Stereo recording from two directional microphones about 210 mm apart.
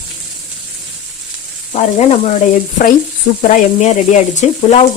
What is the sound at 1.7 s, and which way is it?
Speech, 35° left (ahead or behind).